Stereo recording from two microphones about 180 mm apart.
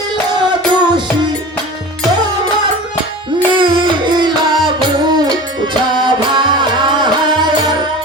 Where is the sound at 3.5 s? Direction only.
25° right (ahead or behind).